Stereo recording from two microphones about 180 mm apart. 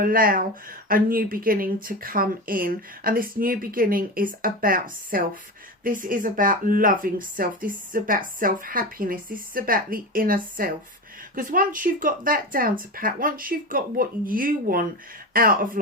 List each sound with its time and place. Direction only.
0.0 s speech: 55° right (ahead or behind)